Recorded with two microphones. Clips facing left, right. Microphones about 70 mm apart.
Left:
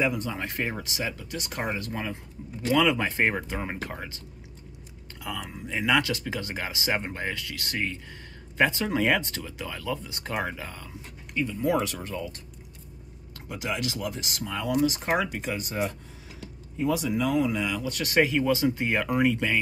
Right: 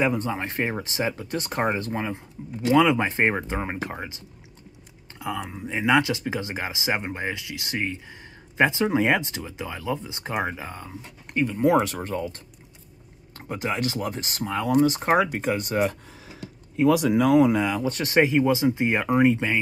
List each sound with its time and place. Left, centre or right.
0.0 s speech: right; by 4.2 s centre
5.2 s speech: right
11.5 s speech: right
11.8 s speech: right
13.5 s speech: right
15.6 s speech: right
16.3 s a sound: right
17.2 s speech: right